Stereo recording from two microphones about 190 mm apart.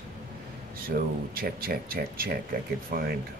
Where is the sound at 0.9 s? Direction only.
50° right (ahead or behind).